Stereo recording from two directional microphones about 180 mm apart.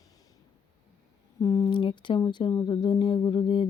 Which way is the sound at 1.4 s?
20° left (ahead or behind).